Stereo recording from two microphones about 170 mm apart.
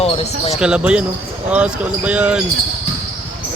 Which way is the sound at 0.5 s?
5° right (ahead or behind).